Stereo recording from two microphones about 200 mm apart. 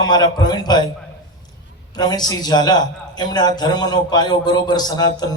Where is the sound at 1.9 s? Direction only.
20° left (ahead or behind).